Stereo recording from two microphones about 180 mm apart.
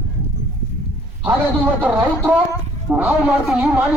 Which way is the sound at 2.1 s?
15° left (ahead or behind).